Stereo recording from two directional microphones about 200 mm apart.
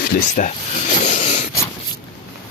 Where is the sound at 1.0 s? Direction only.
30° left (ahead or behind).